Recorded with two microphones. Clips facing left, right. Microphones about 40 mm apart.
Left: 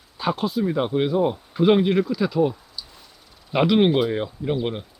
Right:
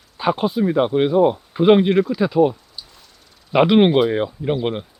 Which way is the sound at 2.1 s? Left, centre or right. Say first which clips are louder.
Right 5 dB; centre.